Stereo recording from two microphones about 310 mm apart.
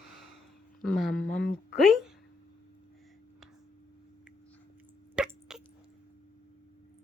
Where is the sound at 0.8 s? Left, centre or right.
Centre.